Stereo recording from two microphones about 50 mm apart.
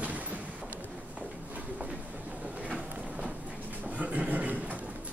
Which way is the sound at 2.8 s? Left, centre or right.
Right.